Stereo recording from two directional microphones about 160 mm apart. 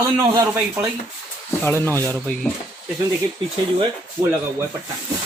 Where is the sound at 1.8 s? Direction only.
15° left (ahead or behind).